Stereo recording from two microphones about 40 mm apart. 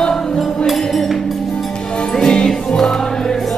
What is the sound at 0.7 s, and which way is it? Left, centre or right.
Music, centre.